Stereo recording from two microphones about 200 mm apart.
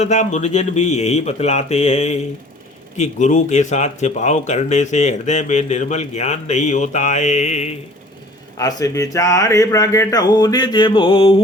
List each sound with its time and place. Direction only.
0.0 s speech: 35° left (ahead or behind)
8.5 s speech: 15° left (ahead or behind)